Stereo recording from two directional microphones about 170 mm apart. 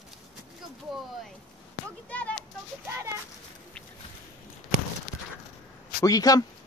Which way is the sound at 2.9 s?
15° right (ahead or behind).